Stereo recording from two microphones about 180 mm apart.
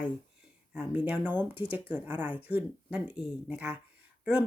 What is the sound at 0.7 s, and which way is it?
Speech, 10° right (ahead or behind).